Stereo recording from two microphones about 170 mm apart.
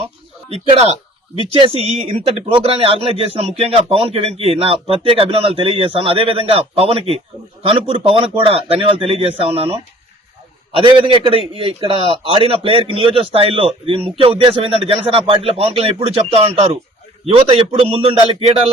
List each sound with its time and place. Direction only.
0.5 s speech: 35° right (ahead or behind)